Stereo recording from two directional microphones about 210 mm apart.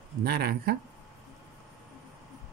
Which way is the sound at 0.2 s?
50° right (ahead or behind).